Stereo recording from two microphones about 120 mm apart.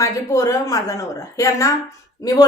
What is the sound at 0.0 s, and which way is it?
A woman's voice, 30° left (ahead or behind).